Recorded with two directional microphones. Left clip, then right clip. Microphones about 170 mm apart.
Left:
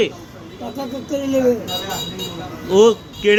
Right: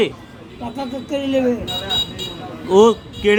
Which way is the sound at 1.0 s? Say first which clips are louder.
Even; 20° right (ahead or behind).